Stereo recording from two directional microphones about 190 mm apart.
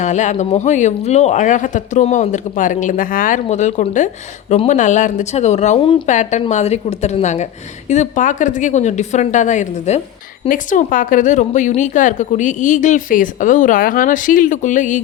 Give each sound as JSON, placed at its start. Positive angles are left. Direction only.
{"t": 0.0, "sound": "speech", "side_deg": 40}